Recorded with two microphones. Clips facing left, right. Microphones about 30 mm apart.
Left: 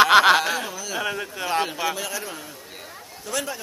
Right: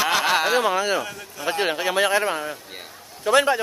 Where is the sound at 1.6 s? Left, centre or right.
Right.